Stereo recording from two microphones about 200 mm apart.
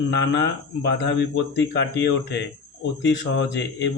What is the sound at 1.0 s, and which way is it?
A man's voice, 60° left (ahead or behind).